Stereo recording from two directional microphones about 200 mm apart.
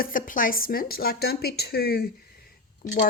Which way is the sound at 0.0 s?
45° left (ahead or behind).